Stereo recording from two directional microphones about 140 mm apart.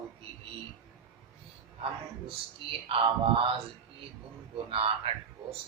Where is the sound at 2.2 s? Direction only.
40° right (ahead or behind).